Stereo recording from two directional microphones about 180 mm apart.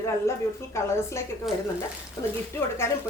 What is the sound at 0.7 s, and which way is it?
Speech, 15° left (ahead or behind).